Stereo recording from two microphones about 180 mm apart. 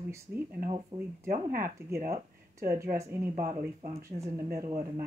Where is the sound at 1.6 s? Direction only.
15° right (ahead or behind).